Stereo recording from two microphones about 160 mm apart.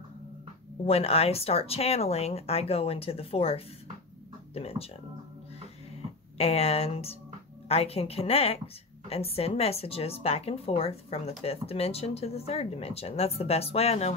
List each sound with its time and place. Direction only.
0.8 s speech: 40° left (ahead or behind)
6.3 s speech: 40° left (ahead or behind)